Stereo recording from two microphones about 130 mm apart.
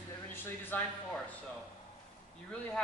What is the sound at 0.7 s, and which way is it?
Speech, 15° left (ahead or behind).